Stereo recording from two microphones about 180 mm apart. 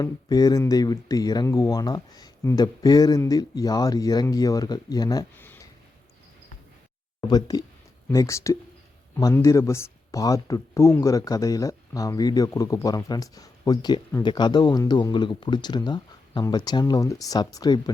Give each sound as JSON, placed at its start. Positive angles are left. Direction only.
{"t": 0.0, "sound": "speech", "side_deg": 20}
{"t": 7.2, "sound": "speech", "side_deg": 20}